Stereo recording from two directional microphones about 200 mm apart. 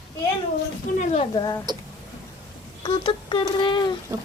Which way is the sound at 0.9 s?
35° left (ahead or behind).